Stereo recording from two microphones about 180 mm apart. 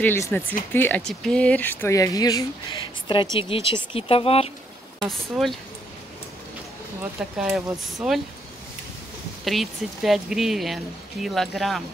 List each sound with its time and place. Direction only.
0.0 s speech: 10° left (ahead or behind); by 4.5 s 30° left (ahead or behind)
5.0 s speech: centre (ahead or behind)
7.0 s speech: 5° right (ahead or behind)
9.4 s speech: centre (ahead or behind)